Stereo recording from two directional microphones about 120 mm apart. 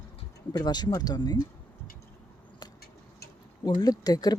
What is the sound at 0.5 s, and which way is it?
Speech, 35° left (ahead or behind).